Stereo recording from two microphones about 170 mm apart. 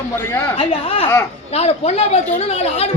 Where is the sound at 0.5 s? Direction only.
35° left (ahead or behind).